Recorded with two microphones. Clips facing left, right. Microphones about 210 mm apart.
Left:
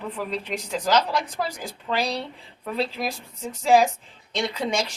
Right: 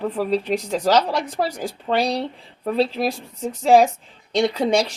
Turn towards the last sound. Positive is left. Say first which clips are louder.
# right 7 dB
turn(degrees=-35)  # may be behind; listen again after turning